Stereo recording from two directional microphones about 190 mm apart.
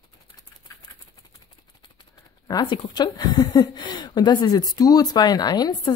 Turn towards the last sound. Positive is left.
turn(degrees=20)  # may be behind; listen again after turning